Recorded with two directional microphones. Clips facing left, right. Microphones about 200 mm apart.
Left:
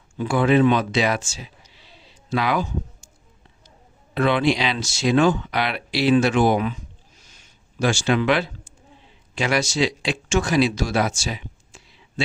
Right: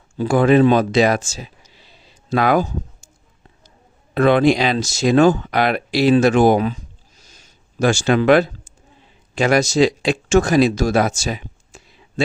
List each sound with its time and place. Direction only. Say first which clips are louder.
0.2 s speech: right 4 dB; 40° right (ahead or behind)
4.1 s speech: right 6 dB; 45° right (ahead or behind)
7.2 s a sound: right 3 dB; 40° right (ahead or behind)
9.3 s speech: right 7 dB; 45° right (ahead or behind)